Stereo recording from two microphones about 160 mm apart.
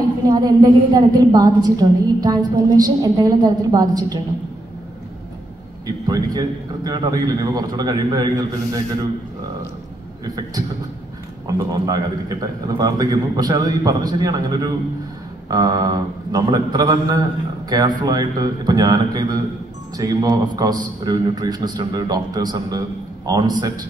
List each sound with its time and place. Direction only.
0.2 s a woman's voice: 25° right (ahead or behind)
5.9 s a woman's voice: 25° right (ahead or behind)
10.2 s a woman's voice: 25° right (ahead or behind)